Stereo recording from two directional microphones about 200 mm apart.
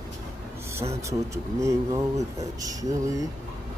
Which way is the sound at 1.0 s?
15° right (ahead or behind).